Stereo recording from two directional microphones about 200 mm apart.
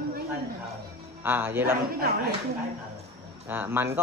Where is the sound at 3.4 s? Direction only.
10° right (ahead or behind).